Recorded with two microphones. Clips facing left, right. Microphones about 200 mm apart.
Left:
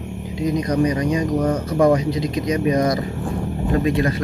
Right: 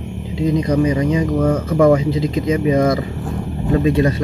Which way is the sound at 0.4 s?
25° right (ahead or behind).